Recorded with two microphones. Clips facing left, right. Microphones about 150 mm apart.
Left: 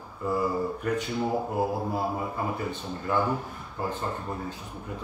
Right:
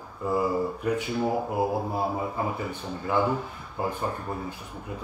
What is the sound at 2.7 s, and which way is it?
Speech, 15° right (ahead or behind).